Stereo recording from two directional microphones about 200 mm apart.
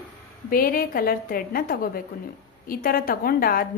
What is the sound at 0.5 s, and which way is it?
A woman's voice, 45° left (ahead or behind).